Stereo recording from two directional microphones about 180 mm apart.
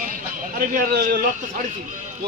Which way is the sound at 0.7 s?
55° right (ahead or behind).